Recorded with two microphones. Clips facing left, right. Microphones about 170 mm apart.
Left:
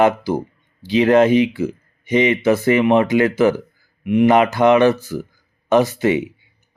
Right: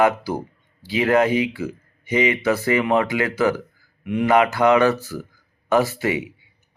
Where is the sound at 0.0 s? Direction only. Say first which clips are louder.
Left 3 dB; 20° left (ahead or behind).